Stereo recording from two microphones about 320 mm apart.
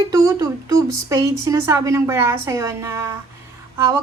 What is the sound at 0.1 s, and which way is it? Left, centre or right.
A woman's voice, centre.